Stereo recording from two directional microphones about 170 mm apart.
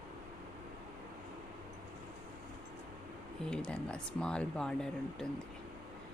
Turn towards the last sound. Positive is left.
turn(degrees=5)  # may be behind; listen again after turning